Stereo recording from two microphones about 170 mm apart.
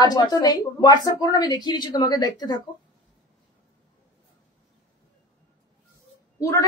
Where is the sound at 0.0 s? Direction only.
25° left (ahead or behind).